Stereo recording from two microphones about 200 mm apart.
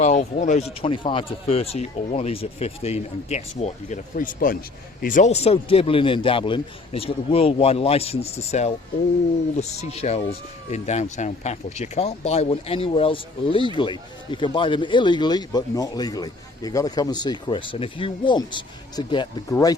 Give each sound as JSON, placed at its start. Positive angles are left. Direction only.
{"t": 0.0, "sound": "speech", "side_deg": 35}
{"t": 0.8, "sound": "speech", "side_deg": 25}